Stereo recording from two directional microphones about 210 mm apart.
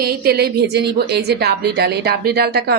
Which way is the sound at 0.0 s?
45° right (ahead or behind).